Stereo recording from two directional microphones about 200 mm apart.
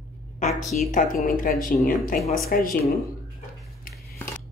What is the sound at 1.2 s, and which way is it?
A woman's voice, 45° left (ahead or behind).